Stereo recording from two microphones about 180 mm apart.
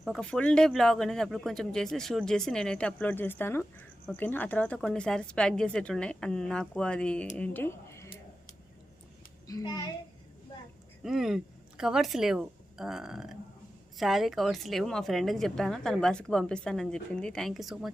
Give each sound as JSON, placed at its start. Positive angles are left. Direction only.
{"t": 0.0, "sound": "a woman's voice", "side_deg": 0}
{"t": 9.5, "sound": "a child's voice", "side_deg": 20}
{"t": 11.0, "sound": "a woman's voice", "side_deg": 0}